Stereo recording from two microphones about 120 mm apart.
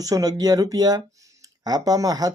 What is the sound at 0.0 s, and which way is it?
Speech, 30° right (ahead or behind).